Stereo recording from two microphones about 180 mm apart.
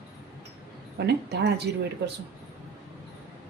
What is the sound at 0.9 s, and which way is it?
Speech, 70° right (ahead or behind).